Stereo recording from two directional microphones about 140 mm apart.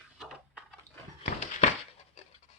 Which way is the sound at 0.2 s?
Centre (ahead or behind).